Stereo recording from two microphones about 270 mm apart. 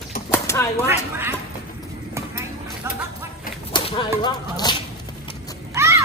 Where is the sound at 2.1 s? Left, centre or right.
Centre.